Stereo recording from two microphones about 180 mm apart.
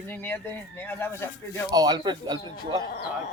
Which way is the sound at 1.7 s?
20° right (ahead or behind).